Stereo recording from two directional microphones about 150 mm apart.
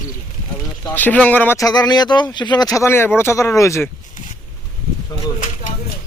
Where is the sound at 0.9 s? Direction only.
10° left (ahead or behind).